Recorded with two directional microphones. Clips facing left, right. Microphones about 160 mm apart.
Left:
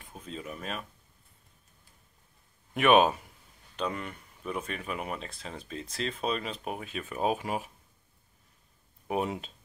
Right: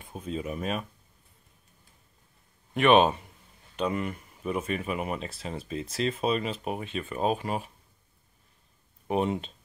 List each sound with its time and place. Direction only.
0.0 s speech: 20° right (ahead or behind)
2.7 s speech: 10° left (ahead or behind)
3.7 s speech: 5° right (ahead or behind)
9.0 s speech: 5° left (ahead or behind)